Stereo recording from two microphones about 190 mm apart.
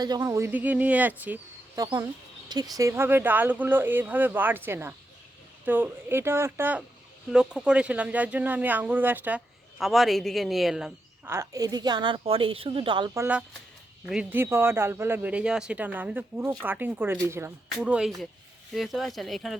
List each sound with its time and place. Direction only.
0.0 s speech: 20° right (ahead or behind); by 10.9 s centre (ahead or behind)
11.3 s a woman's voice: 15° right (ahead or behind)
13.1 s speech: 10° right (ahead or behind)